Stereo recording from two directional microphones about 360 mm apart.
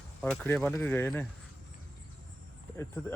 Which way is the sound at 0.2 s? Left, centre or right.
Centre.